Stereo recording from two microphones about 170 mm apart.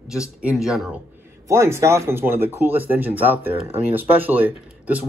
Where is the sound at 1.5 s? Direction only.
15° right (ahead or behind).